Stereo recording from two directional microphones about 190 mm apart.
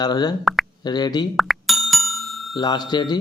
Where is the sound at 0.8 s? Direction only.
20° left (ahead or behind).